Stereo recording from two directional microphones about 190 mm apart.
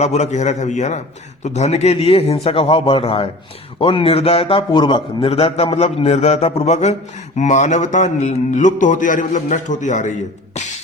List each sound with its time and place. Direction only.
0.0 s a man's voice: 35° left (ahead or behind)